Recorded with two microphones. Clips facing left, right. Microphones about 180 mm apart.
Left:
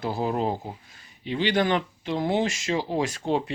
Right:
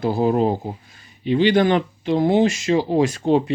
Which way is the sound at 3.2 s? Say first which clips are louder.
Right 8 dB; 55° right (ahead or behind).